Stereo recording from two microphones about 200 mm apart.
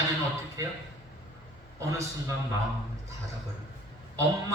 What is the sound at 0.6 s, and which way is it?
Speech, 15° right (ahead or behind).